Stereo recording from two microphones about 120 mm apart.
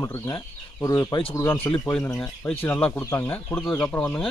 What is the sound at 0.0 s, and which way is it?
Speech, 25° left (ahead or behind).